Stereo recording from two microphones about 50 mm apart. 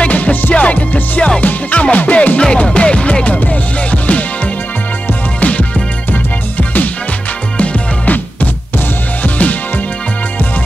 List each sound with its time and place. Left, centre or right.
0.0 s music: left
5.4 s music: left
7.5 s music: left